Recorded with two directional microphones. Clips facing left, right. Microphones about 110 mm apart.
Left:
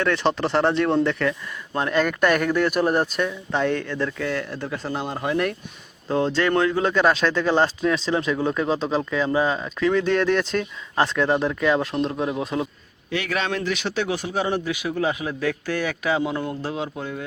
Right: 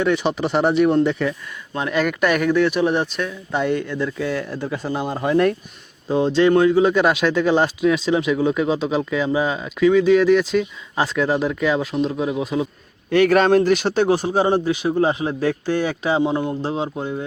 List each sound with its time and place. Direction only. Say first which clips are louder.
0.0 s speech: right 2 dB; 15° right (ahead or behind)
6.1 s speech: right 5 dB; 15° right (ahead or behind)
13.1 s speech: right 11 dB; 50° right (ahead or behind); by 17.2 s 25° right (ahead or behind)